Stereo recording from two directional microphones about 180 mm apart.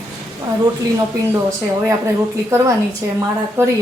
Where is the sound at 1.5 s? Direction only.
15° right (ahead or behind).